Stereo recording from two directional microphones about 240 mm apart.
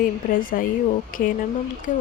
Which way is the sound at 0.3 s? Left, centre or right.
Left.